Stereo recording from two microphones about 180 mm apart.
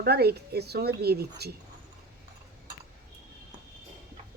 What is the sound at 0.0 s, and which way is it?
Speech, 60° right (ahead or behind).